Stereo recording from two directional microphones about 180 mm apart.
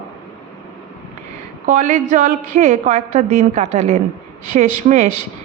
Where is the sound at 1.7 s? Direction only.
45° right (ahead or behind).